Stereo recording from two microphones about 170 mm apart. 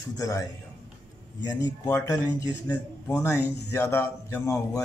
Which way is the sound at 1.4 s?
20° left (ahead or behind).